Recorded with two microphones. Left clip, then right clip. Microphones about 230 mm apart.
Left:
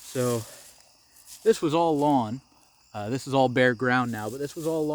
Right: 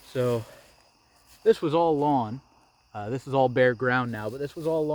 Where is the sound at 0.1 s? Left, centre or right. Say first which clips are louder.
Right 1 dB; left.